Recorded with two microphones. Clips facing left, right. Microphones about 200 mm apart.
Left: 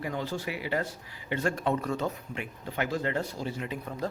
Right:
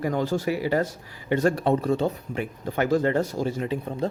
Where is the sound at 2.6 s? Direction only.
45° right (ahead or behind).